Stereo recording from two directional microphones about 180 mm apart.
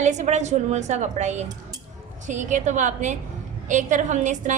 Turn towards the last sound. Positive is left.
turn(degrees=-45)  # may be behind; listen again after turning